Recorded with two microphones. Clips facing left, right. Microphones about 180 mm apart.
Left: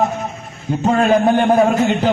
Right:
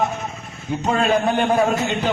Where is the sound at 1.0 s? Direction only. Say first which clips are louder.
Left 5 dB; 45° left (ahead or behind).